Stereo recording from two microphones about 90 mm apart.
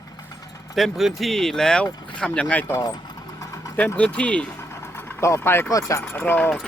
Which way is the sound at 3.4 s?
40° left (ahead or behind).